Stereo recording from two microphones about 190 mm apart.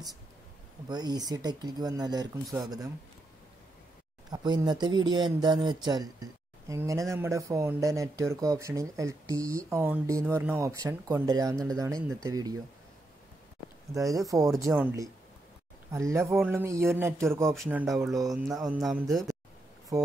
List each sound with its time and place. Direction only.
0.8 s speech: 20° right (ahead or behind)
4.3 s speech: 20° right (ahead or behind)
13.9 s speech: 15° right (ahead or behind)
17.6 s music: 5° right (ahead or behind)
19.9 s speech: 20° right (ahead or behind)